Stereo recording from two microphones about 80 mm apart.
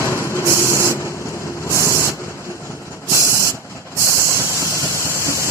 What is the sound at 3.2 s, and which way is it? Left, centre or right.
Vehicle, left.